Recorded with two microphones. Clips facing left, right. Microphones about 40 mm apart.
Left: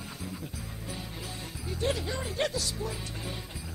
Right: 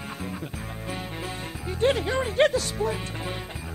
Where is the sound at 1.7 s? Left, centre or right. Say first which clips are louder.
Right 8 dB; right.